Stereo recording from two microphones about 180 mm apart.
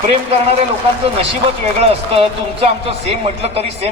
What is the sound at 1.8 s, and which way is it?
Speech, 35° right (ahead or behind).